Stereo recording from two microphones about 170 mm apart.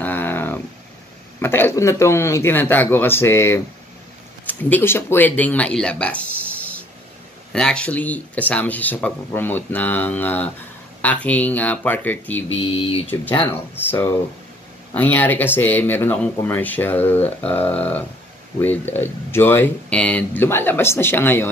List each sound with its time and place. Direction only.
0.0 s a sound: 10° left (ahead or behind)
1.4 s speech: 15° left (ahead or behind)
12.6 s speech: 30° left (ahead or behind)
13.0 s speech: 10° left (ahead or behind)